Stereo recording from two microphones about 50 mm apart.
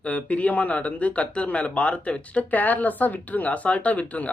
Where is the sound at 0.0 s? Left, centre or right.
Left.